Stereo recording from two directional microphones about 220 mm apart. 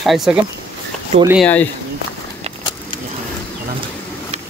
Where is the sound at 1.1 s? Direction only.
30° right (ahead or behind).